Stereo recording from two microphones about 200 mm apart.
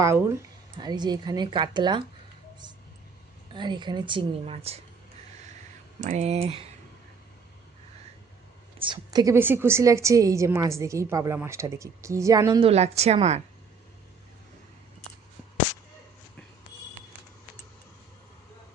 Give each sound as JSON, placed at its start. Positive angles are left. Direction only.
{"t": 0.8, "sound": "speech", "side_deg": -20}
{"t": 3.5, "sound": "speech", "side_deg": -25}
{"t": 6.1, "sound": "speech", "side_deg": -35}
{"t": 8.9, "sound": "a woman's voice", "side_deg": -20}